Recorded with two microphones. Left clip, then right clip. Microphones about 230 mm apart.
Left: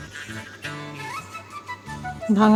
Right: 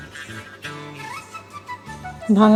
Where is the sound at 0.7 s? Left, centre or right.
Centre.